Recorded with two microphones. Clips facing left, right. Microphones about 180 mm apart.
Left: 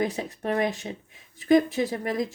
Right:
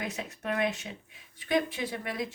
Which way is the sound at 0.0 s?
35° left (ahead or behind).